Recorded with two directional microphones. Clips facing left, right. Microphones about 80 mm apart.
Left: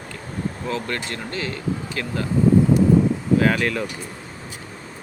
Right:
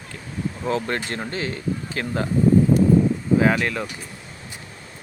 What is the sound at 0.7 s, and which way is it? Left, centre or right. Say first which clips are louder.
Speech: right 5 dB; right.